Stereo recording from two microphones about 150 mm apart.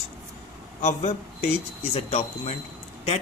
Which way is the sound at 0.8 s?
50° left (ahead or behind).